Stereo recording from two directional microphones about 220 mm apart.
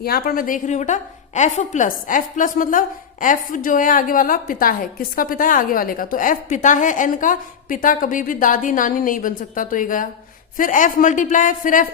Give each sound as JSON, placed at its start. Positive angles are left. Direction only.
{"t": 0.0, "sound": "a woman's voice", "side_deg": 45}